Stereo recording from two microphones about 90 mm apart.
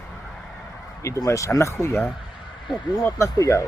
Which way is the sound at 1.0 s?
35° left (ahead or behind).